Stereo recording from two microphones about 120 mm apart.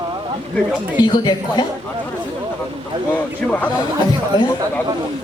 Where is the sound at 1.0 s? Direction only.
35° left (ahead or behind).